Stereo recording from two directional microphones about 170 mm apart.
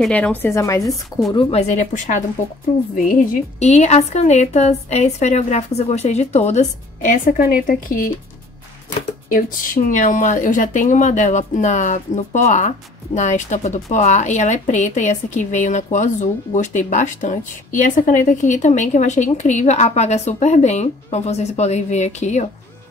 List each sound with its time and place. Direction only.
0.0 s speech: 10° left (ahead or behind)
1.3 s a woman's voice: 40° left (ahead or behind); by 8.1 s 55° left (ahead or behind)
9.8 s speech: 50° left (ahead or behind)